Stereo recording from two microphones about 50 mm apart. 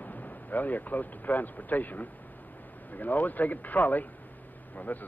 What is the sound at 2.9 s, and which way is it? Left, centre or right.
Speech, left.